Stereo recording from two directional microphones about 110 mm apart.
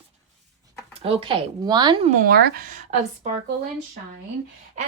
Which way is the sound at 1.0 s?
55° right (ahead or behind).